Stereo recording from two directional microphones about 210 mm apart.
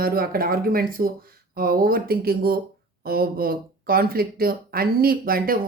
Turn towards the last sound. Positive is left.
turn(degrees=-45)  # may be behind; listen again after turning